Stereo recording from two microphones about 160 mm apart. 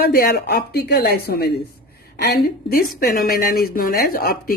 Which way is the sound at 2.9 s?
65° left (ahead or behind).